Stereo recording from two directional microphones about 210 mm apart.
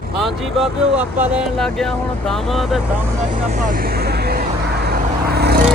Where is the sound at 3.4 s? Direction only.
35° right (ahead or behind).